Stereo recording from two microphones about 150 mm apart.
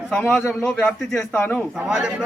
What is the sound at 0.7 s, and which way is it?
Speech, 10° left (ahead or behind).